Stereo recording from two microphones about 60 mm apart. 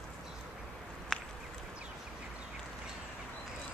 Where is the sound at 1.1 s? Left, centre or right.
Centre.